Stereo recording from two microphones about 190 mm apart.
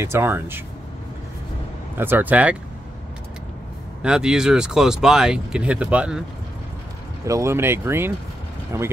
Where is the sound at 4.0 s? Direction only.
5° right (ahead or behind).